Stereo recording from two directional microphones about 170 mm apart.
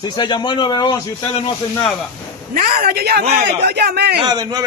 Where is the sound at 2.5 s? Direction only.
60° right (ahead or behind).